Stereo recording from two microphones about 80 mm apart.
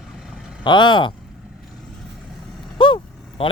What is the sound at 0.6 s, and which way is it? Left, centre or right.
Speech, left.